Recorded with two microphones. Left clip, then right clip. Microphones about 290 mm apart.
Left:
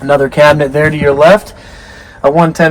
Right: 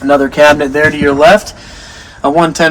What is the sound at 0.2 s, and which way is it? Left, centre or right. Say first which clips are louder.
Speech: even; left.